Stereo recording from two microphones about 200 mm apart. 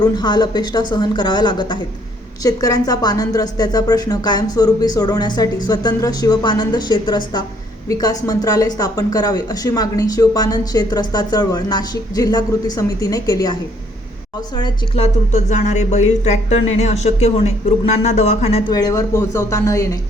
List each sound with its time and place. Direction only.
0.0 s a woman's voice: 20° left (ahead or behind)
18.7 s speech: 20° left (ahead or behind)